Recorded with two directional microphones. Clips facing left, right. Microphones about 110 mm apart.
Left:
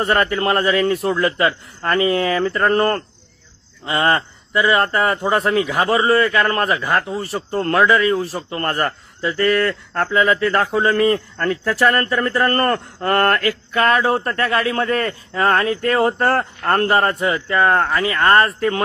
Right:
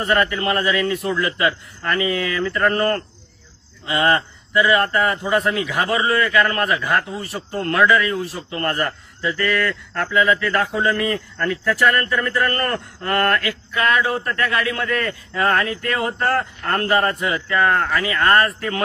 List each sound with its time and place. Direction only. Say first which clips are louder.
0.0 s speech: left 2 dB; 40° left (ahead or behind)